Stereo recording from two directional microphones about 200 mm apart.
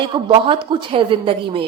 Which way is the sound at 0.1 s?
25° right (ahead or behind).